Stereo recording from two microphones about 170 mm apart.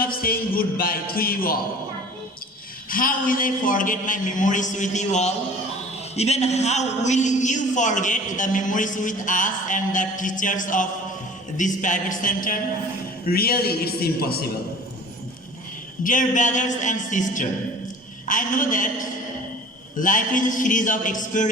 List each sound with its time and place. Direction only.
0.0 s music: 60° left (ahead or behind)
2.9 s a man's voice: 55° left (ahead or behind)
13.2 s music: 65° left (ahead or behind)
16.0 s a man's voice: 50° left (ahead or behind)